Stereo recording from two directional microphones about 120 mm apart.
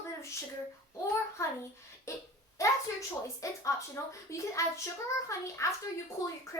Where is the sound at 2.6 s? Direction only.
25° left (ahead or behind).